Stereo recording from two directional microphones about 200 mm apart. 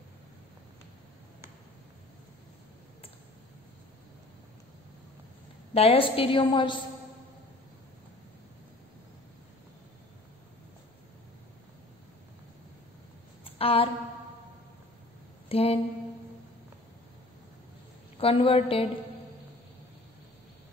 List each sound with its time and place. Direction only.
5.7 s a woman's voice: 30° left (ahead or behind)
13.4 s a sound: 30° left (ahead or behind)
15.4 s speech: 30° left (ahead or behind)
18.1 s a woman's voice: 30° left (ahead or behind)